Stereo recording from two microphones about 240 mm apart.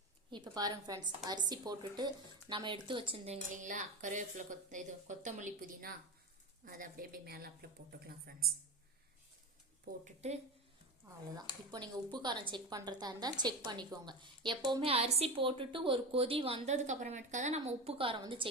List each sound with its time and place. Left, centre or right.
0.3 s a woman's voice: centre; by 8.5 s right
10.0 s a woman's voice: right
11.3 s a woman's voice: centre